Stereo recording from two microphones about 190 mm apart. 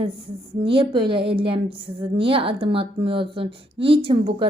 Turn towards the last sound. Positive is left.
turn(degrees=-30)  # may be behind; listen again after turning